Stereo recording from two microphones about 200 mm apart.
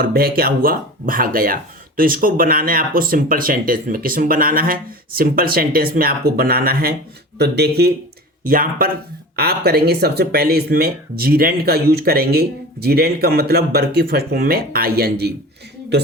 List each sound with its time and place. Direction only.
0.0 s speech: 50° right (ahead or behind)